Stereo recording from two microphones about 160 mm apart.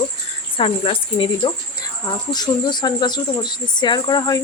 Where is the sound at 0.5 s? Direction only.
35° left (ahead or behind).